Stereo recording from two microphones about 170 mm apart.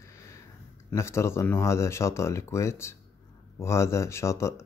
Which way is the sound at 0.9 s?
15° left (ahead or behind).